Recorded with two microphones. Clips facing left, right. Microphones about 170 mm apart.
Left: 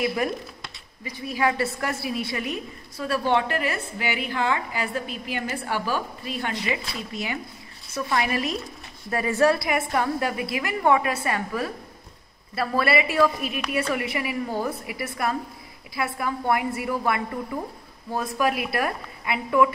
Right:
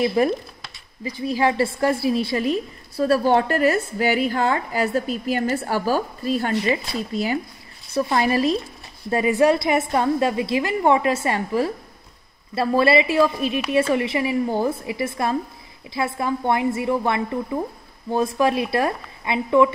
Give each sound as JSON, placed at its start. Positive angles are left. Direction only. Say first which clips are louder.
{"t": 0.0, "sound": "a woman's voice", "louder": "right 6 dB", "side_deg": -30}
{"t": 9.1, "sound": "a woman's voice", "louder": "right 4 dB", "side_deg": -15}